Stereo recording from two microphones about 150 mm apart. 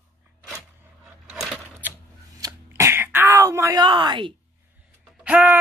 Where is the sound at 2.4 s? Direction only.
20° right (ahead or behind).